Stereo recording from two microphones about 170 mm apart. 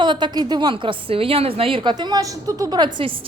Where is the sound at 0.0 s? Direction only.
25° right (ahead or behind).